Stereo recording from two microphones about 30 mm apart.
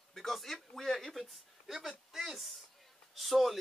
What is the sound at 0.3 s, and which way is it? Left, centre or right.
Speech, centre.